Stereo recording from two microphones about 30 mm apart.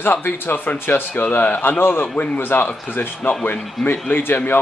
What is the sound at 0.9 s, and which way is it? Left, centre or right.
A man's voice, left.